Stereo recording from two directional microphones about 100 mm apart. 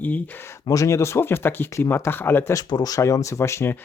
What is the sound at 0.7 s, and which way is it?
Speech, 30° left (ahead or behind).